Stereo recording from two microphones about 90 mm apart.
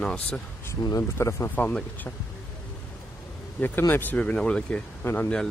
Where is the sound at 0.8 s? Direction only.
40° left (ahead or behind).